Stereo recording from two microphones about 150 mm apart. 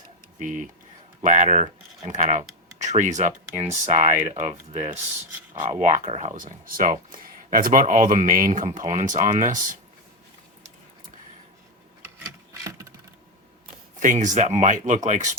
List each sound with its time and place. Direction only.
0.3 s speech: 60° right (ahead or behind)
12.6 s a sound: 20° right (ahead or behind)
14.0 s speech: 60° right (ahead or behind)